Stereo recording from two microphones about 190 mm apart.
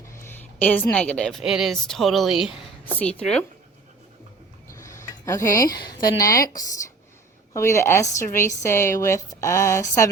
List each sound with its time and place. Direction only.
0.0 s a woman's voice: 15° left (ahead or behind)
4.7 s a sound: 15° left (ahead or behind)
5.7 s a woman's voice: 20° left (ahead or behind)